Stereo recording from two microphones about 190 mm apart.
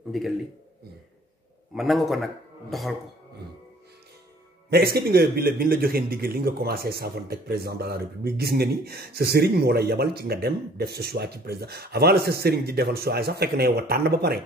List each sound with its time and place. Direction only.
0.1 s a man's voice: centre (ahead or behind)
1.8 s a man's voice: centre (ahead or behind)
4.6 s a man's voice: 55° right (ahead or behind)